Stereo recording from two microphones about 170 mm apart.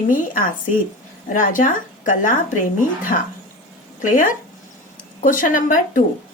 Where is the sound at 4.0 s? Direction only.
50° left (ahead or behind).